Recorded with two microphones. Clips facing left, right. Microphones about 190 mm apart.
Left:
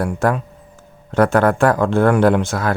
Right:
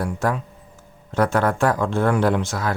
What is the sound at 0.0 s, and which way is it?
Speech, 60° left (ahead or behind).